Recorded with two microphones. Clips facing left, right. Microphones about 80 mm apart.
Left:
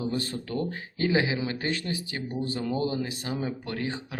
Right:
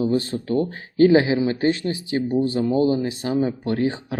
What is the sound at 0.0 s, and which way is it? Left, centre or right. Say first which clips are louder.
Speech: right 9 dB; right.